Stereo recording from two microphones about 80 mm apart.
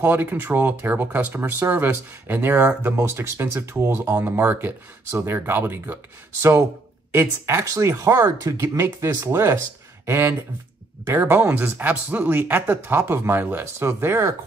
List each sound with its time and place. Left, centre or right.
0.0 s speech: right
7.1 s speech: right